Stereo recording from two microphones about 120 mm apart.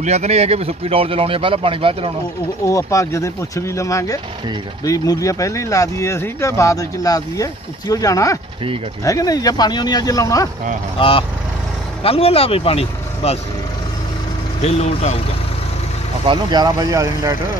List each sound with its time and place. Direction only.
0.0 s speech: 65° right (ahead or behind)
2.6 s speech: 25° left (ahead or behind)
11.0 s speech: 50° left (ahead or behind)
14.6 s speech: 60° left (ahead or behind)
16.3 s speech: 40° right (ahead or behind)